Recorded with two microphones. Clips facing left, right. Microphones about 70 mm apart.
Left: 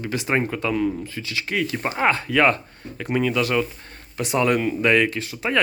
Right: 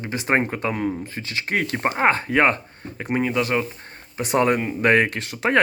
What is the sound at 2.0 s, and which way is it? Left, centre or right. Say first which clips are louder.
Speech: even; right.